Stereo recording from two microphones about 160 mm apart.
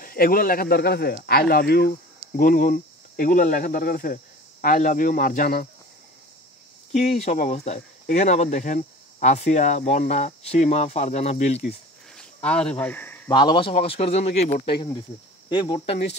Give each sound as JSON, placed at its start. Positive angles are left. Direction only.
{"t": 0.0, "sound": "speech", "side_deg": 65}
{"t": 2.3, "sound": "speech", "side_deg": 60}
{"t": 7.0, "sound": "speech", "side_deg": 50}
{"t": 12.2, "sound": "speech", "side_deg": 5}
{"t": 13.3, "sound": "speech", "side_deg": 30}
{"t": 15.5, "sound": "speech", "side_deg": 30}